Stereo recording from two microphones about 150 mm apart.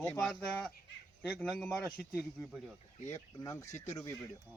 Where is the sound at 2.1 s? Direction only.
5° right (ahead or behind).